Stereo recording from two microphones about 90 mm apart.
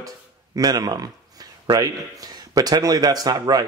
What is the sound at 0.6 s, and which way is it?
Speech, 45° right (ahead or behind).